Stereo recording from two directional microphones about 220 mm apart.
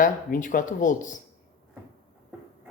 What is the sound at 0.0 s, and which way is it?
Speech, 35° left (ahead or behind).